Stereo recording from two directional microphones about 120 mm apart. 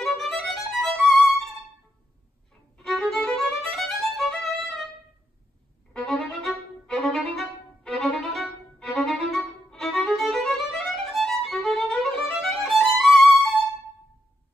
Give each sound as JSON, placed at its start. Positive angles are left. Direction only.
{"t": 0.0, "sound": "violin", "side_deg": 0}
{"t": 2.8, "sound": "violin", "side_deg": 0}
{"t": 5.9, "sound": "violin", "side_deg": 0}